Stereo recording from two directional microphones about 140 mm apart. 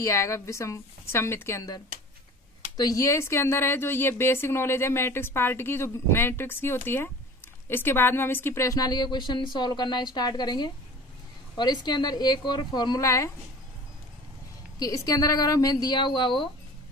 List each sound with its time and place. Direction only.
0.0 s a woman's voice: 20° left (ahead or behind)
2.8 s a woman's voice: 25° left (ahead or behind)
14.8 s a woman's voice: 25° left (ahead or behind)